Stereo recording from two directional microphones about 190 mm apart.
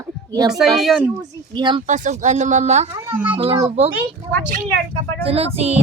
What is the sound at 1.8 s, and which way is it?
Speech, 40° right (ahead or behind).